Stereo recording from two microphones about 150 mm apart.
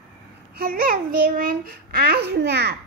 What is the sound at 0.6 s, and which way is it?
A child's voice, 75° right (ahead or behind).